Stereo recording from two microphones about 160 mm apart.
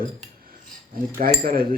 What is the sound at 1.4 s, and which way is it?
Speech, 65° right (ahead or behind).